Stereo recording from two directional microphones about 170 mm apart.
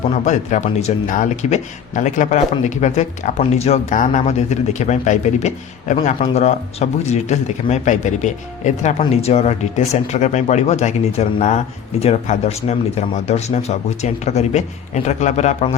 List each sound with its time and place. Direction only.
0.3 s speech: 45° left (ahead or behind)